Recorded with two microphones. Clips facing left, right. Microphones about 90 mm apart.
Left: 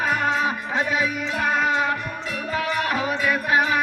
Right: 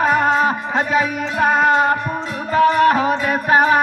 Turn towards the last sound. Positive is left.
turn(degrees=-40)  # may be behind; listen again after turning